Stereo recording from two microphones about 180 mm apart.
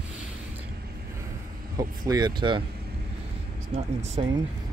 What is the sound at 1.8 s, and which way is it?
Speech, 20° right (ahead or behind).